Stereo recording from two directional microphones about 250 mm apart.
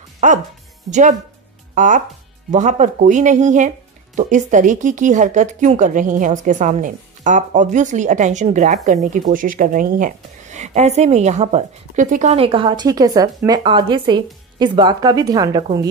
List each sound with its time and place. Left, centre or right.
0.2 s speech: right; by 15.9 s centre